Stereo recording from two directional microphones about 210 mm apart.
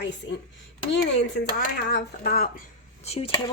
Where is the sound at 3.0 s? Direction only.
30° left (ahead or behind).